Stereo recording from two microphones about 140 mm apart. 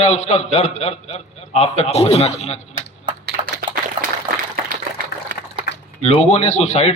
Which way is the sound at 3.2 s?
90° right.